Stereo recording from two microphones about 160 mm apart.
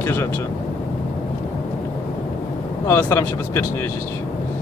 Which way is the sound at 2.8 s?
15° left (ahead or behind).